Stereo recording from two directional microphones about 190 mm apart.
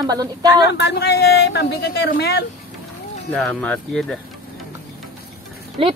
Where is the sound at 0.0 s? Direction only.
20° right (ahead or behind).